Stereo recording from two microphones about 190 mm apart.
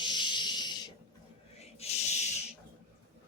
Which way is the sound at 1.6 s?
35° left (ahead or behind).